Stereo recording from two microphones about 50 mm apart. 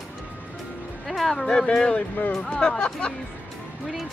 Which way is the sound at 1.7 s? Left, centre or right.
Left.